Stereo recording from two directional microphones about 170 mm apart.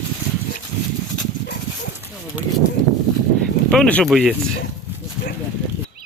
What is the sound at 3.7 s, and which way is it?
Speech, 5° left (ahead or behind).